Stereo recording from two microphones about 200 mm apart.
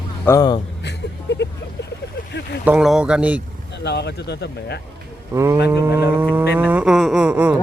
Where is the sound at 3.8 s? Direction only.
55° left (ahead or behind).